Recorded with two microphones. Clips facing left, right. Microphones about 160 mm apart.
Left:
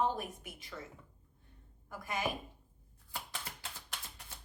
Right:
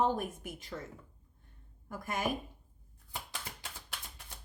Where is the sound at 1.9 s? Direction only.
45° right (ahead or behind).